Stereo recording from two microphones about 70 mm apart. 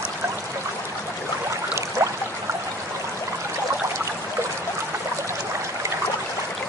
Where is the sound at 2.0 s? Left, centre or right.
Right.